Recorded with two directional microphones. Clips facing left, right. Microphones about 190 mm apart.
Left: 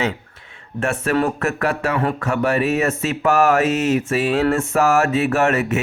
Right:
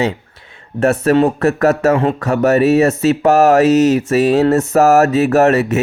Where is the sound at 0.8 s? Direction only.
40° right (ahead or behind).